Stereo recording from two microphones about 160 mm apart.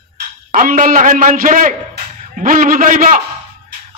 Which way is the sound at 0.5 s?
60° right (ahead or behind).